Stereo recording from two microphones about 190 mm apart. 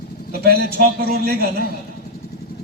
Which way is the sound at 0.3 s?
50° right (ahead or behind).